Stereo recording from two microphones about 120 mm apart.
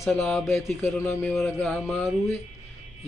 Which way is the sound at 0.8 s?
20° left (ahead or behind).